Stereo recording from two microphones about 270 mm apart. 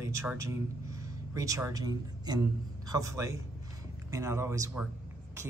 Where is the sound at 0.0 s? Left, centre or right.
Centre.